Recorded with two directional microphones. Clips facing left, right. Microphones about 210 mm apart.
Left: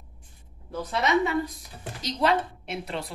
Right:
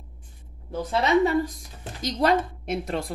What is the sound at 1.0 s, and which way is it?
Speech, 35° right (ahead or behind).